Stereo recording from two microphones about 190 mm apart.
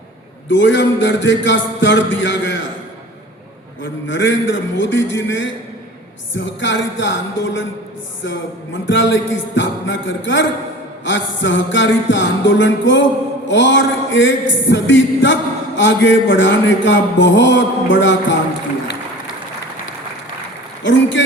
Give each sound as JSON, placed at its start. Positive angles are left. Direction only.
{"t": 0.5, "sound": "music", "side_deg": 70}
{"t": 4.0, "sound": "music", "side_deg": 75}
{"t": 20.8, "sound": "music", "side_deg": 75}